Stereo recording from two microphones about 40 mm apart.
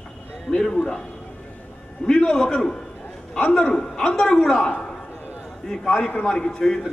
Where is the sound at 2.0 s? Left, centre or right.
Centre.